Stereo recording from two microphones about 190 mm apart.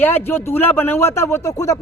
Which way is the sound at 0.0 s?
10° left (ahead or behind).